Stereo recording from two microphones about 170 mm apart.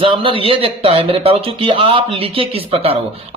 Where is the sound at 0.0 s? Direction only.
30° right (ahead or behind).